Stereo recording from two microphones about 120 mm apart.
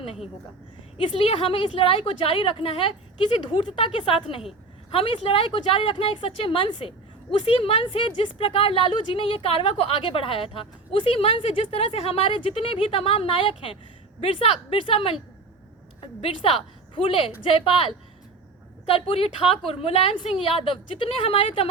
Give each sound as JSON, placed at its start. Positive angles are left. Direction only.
{"t": 0.0, "sound": "a woman's voice", "side_deg": 50}
{"t": 18.9, "sound": "a woman's voice", "side_deg": 50}